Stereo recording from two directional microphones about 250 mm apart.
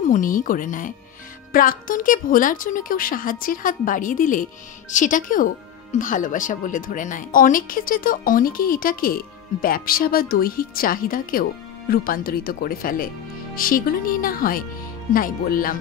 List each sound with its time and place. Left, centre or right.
0.1 s speech: left